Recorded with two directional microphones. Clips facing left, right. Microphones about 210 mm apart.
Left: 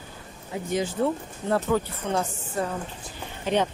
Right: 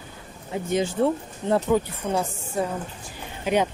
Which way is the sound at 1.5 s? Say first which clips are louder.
Right 3 dB; 15° right (ahead or behind).